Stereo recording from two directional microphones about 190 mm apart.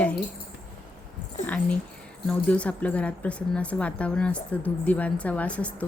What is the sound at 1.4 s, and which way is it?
A woman's voice, 5° left (ahead or behind).